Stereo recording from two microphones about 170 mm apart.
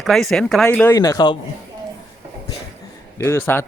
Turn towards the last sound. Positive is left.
turn(degrees=15)  # may be behind; listen again after turning